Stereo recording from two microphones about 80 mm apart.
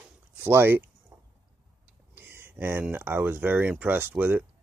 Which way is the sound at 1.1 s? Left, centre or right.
Right.